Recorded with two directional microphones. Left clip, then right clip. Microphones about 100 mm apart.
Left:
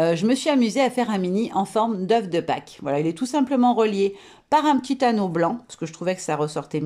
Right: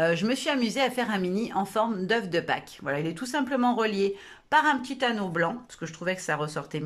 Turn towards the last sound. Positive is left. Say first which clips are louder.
# left 5 dB
turn(degrees=40)  # may be behind; listen again after turning